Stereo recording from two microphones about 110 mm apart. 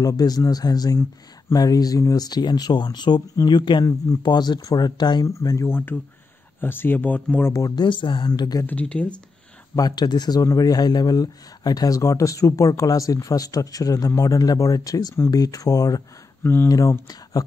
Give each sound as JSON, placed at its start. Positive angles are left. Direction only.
{"t": 0.0, "sound": "speech", "side_deg": 35}
{"t": 5.3, "sound": "speech", "side_deg": 30}
{"t": 5.7, "sound": "speech", "side_deg": 20}
{"t": 7.5, "sound": "speech", "side_deg": 35}
{"t": 7.8, "sound": "a woman's voice", "side_deg": 45}
{"t": 8.6, "sound": "speech", "side_deg": 10}
{"t": 9.8, "sound": "speech", "side_deg": 40}